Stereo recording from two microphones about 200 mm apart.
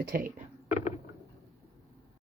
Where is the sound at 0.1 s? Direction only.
40° right (ahead or behind).